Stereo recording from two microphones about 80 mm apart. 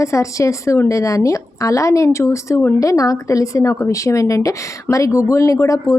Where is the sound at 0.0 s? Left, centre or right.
Left.